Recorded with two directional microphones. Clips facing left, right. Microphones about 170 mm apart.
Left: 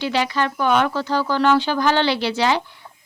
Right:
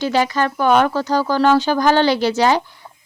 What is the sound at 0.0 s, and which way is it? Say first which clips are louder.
Speech: right 3 dB; 45° right (ahead or behind).